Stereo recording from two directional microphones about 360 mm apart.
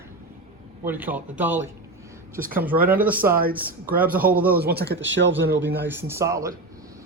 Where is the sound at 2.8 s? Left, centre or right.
Centre.